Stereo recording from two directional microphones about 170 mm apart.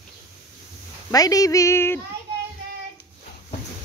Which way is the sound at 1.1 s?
20° left (ahead or behind).